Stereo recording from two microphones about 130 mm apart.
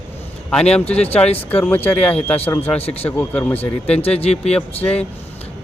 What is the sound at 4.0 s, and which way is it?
Speech, 50° left (ahead or behind).